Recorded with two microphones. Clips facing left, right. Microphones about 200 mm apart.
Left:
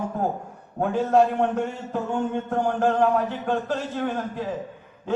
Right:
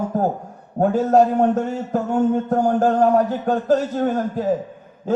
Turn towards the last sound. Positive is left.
turn(degrees=-40)  # may be behind; listen again after turning